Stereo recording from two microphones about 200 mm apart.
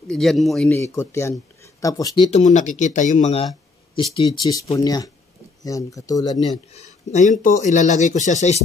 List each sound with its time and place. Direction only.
0.1 s speech: centre (ahead or behind)
0.7 s speech: 15° left (ahead or behind)
2.3 s speech: 40° left (ahead or behind); by 6.4 s 20° left (ahead or behind)
6.7 s speech: 35° left (ahead or behind)